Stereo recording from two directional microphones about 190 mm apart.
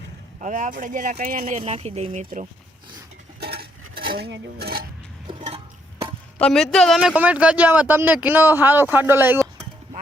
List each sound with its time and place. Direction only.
0.4 s speech: 45° right (ahead or behind)
1.5 s speech: 30° right (ahead or behind)
3.4 s stir: 55° right (ahead or behind)
5.4 s a sound: 30° right (ahead or behind)
6.4 s speech: centre (ahead or behind)